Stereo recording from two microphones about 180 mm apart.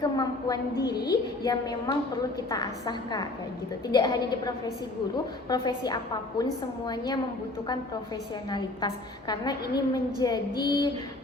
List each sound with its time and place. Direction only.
0.0 s a woman's voice: 20° left (ahead or behind)
8.4 s a woman's voice: 25° left (ahead or behind)